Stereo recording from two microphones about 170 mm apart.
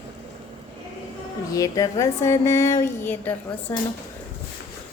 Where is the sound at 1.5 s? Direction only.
20° left (ahead or behind).